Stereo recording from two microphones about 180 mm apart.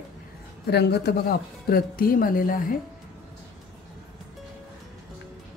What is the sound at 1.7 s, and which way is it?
Speech, 55° left (ahead or behind).